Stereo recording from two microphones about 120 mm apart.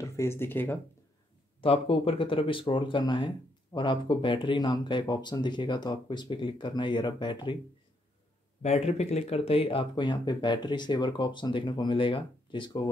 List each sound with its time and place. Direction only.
0.0 s speech: 25° left (ahead or behind)
1.6 s speech: 50° left (ahead or behind)
8.6 s speech: 65° left (ahead or behind); by 12.9 s 40° left (ahead or behind)